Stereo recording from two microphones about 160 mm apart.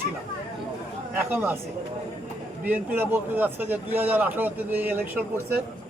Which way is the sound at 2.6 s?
10° right (ahead or behind).